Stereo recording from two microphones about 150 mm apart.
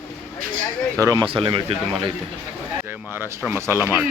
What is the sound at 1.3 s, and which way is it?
Speech, 35° right (ahead or behind).